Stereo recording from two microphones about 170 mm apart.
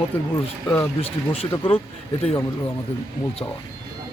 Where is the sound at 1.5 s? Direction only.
10° left (ahead or behind).